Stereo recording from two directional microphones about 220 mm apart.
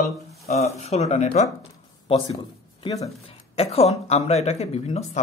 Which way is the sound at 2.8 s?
25° left (ahead or behind).